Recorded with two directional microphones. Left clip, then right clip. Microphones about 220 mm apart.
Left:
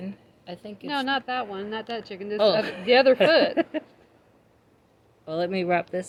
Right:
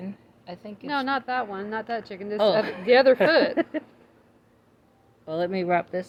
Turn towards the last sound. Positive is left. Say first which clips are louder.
# even
turn(degrees=25)  # may be behind; listen again after turning